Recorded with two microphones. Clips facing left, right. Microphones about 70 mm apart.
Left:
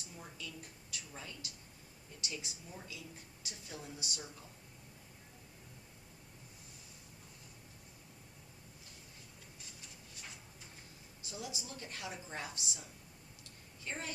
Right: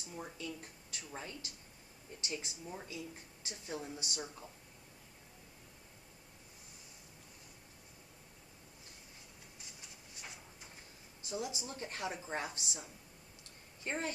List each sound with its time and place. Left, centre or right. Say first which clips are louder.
0.2 s a woman's voice: right 5 dB; right
11.3 s a woman's voice: right 5 dB; right